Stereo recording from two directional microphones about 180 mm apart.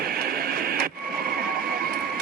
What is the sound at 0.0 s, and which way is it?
Radio, 55° right (ahead or behind).